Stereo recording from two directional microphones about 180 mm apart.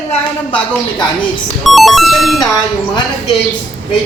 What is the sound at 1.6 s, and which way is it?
Speech, centre (ahead or behind).